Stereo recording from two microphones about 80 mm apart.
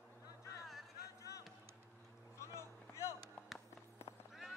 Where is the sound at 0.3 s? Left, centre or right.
Left.